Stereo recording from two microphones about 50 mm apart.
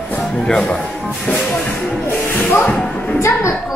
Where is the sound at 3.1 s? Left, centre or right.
Left.